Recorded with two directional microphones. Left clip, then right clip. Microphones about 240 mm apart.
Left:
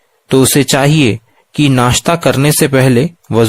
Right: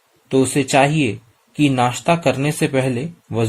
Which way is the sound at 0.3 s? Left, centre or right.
Left.